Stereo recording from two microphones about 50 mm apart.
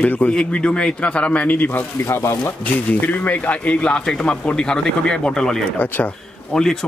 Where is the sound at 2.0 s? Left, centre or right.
Left.